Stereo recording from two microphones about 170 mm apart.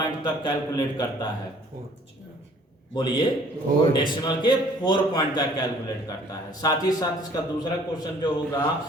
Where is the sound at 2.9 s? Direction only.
25° left (ahead or behind).